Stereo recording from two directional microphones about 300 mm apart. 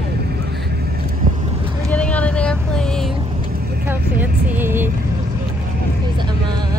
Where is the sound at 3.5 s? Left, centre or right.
Right.